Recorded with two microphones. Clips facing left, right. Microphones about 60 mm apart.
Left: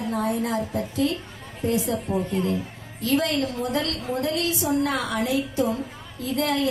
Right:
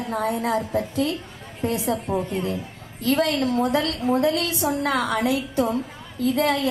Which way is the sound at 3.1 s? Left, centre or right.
Right.